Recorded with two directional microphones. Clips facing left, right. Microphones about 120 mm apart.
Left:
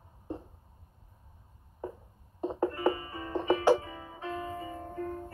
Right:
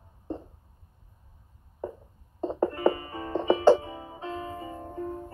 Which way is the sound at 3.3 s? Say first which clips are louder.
Right 5 dB; 20° right (ahead or behind).